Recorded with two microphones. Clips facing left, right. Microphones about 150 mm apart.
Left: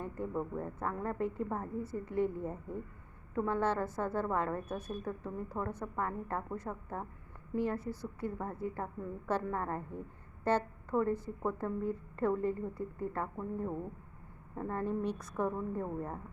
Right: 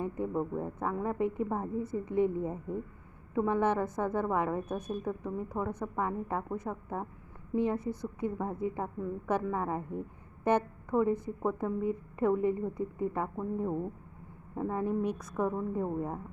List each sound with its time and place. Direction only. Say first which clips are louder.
0.0 s a woman's voice: right 5 dB; 15° right (ahead or behind)
14.5 s a woman's voice: right 4 dB; 10° right (ahead or behind)